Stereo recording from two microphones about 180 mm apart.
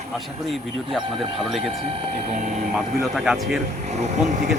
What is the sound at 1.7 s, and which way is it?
Speech, 35° right (ahead or behind).